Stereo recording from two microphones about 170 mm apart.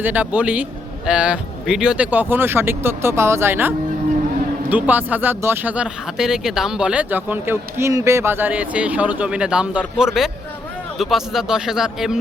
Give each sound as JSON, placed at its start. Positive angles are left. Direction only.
{"t": 0.0, "sound": "speech", "side_deg": -10}